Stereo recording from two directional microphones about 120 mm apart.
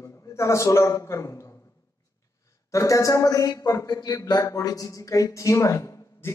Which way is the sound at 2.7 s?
25° left (ahead or behind).